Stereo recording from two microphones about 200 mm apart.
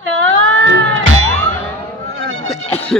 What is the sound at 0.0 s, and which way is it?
Cat, 70° right (ahead or behind).